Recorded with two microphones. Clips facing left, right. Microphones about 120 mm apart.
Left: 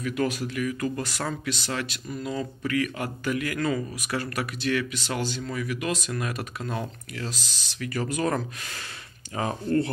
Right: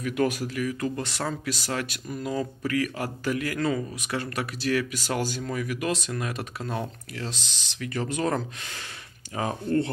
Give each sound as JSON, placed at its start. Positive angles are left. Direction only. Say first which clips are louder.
{"t": 0.0, "sound": "speech", "louder": "right 1 dB", "side_deg": -50}
{"t": 1.4, "sound": "speech", "louder": "even", "side_deg": -40}
{"t": 4.6, "sound": "speech", "louder": "right 1 dB", "side_deg": -40}
{"t": 5.9, "sound": "speech", "louder": "even", "side_deg": -30}